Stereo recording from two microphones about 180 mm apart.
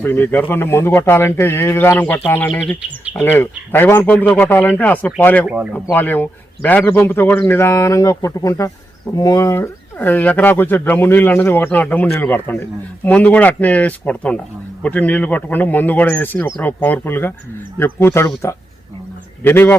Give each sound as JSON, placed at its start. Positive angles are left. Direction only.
{"t": 0.0, "sound": "speech", "side_deg": 10}
{"t": 2.6, "sound": "speech", "side_deg": -5}
{"t": 3.2, "sound": "speech", "side_deg": 10}
{"t": 19.4, "sound": "speech", "side_deg": 10}